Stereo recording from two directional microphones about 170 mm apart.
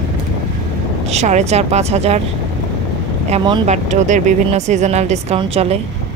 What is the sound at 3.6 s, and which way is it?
Speech, 45° right (ahead or behind).